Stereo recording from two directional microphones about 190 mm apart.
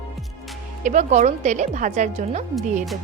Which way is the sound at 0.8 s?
40° right (ahead or behind).